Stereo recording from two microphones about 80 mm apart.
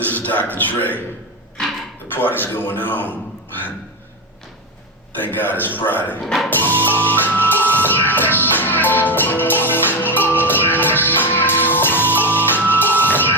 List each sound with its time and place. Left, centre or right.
0.0 s a sound: left
0.5 s a man's voice: left
1.6 s a sound: centre
2.1 s a man's voice: left
5.2 s a man's voice: left
6.6 s music: left